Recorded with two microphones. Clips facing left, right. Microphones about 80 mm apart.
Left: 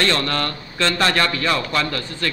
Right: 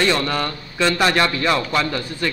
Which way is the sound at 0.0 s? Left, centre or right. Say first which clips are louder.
Right 1 dB; centre.